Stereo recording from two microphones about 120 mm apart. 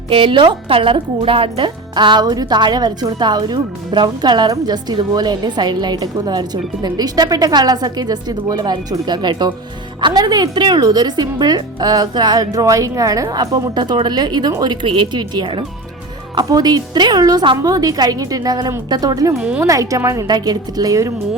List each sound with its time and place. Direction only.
0.1 s speech: 45° right (ahead or behind)
19.4 s speech: 10° right (ahead or behind)
19.6 s speech: 25° right (ahead or behind)